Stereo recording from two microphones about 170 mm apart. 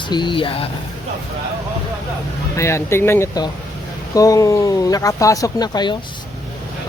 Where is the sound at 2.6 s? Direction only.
15° left (ahead or behind).